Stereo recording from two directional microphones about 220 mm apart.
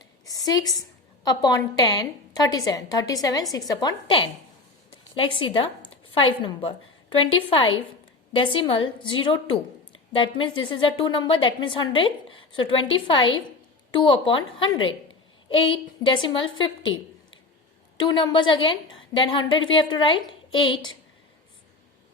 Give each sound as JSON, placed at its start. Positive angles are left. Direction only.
{"t": 0.0, "sound": "a woman's voice", "side_deg": 15}
{"t": 10.2, "sound": "a woman's voice", "side_deg": 20}
{"t": 18.3, "sound": "a woman's voice", "side_deg": 20}